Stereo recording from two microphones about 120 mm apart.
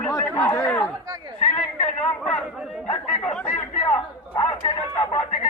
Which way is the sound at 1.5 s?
10° left (ahead or behind).